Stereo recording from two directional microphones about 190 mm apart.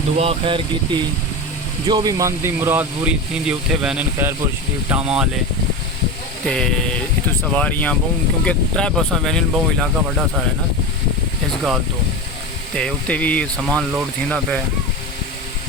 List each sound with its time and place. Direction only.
0.2 s speech: 30° right (ahead or behind); by 5.3 s 5° right (ahead or behind)
6.4 s speech: 5° left (ahead or behind)
12.7 s speech: 5° left (ahead or behind)